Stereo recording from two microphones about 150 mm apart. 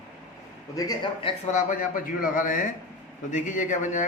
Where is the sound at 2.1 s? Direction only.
65° left (ahead or behind).